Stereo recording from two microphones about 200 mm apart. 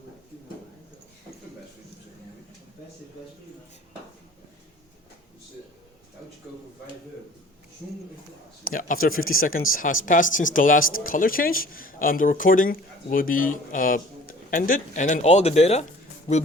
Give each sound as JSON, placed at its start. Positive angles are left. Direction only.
{"t": 8.6, "sound": "speech", "side_deg": 45}